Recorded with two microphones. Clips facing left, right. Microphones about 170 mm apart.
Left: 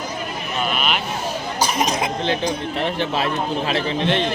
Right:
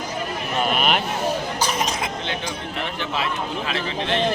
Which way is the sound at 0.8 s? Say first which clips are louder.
Right 2 dB; 45° right (ahead or behind).